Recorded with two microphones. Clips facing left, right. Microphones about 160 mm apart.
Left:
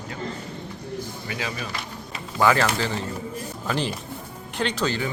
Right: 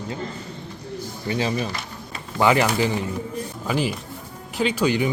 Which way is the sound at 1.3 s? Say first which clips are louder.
Right 9 dB; 30° right (ahead or behind).